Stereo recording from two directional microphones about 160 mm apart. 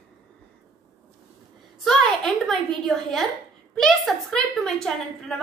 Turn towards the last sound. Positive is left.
turn(degrees=5)  # may be behind; listen again after turning